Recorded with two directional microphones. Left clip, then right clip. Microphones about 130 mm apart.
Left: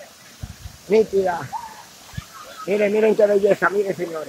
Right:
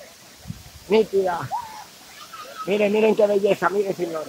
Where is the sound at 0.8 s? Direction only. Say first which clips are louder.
Left 2 dB; 5° right (ahead or behind).